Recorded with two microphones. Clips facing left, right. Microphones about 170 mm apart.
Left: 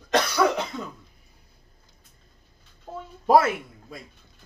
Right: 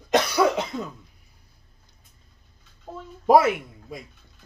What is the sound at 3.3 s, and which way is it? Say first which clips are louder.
Speech: right 2 dB; 15° right (ahead or behind).